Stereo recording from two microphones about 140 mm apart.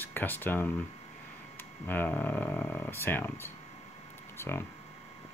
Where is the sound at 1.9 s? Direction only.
15° left (ahead or behind).